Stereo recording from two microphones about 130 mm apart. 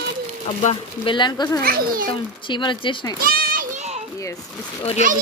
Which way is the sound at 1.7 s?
90° right.